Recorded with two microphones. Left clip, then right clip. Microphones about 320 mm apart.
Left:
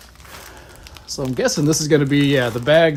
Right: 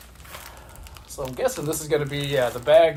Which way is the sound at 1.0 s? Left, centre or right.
Left.